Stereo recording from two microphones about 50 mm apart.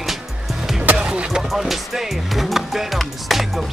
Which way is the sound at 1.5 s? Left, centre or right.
Centre.